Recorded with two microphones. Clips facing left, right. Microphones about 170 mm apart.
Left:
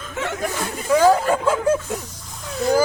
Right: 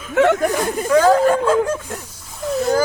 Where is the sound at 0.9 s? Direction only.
10° left (ahead or behind).